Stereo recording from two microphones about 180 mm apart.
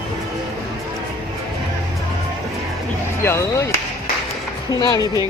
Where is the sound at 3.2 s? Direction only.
15° left (ahead or behind).